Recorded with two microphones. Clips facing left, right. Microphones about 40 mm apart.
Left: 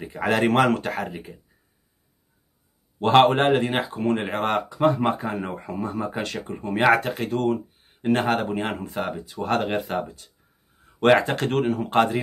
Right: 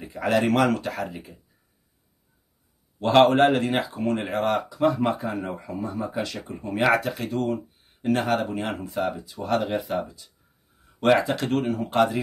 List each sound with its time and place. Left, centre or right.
0.0 s speech: left
3.0 s a man's voice: left
3.8 s speech: left